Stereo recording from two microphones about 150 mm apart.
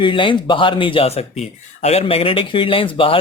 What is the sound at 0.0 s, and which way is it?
Speech, 35° left (ahead or behind).